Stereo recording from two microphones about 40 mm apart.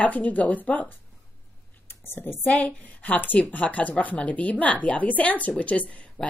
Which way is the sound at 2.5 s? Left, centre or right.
Left.